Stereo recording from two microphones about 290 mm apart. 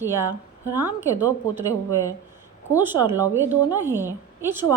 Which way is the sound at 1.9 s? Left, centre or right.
Centre.